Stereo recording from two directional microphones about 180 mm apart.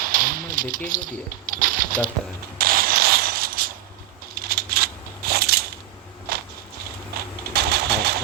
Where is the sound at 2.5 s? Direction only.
55° right (ahead or behind).